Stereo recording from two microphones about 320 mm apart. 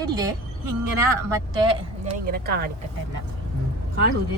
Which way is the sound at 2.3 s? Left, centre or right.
Right.